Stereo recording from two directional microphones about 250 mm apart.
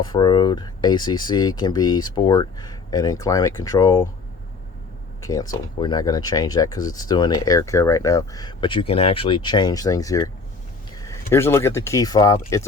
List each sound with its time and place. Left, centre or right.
0.0 s speech: centre
5.2 s speech: centre